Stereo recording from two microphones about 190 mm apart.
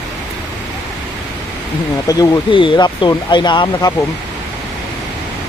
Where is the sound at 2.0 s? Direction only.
20° left (ahead or behind).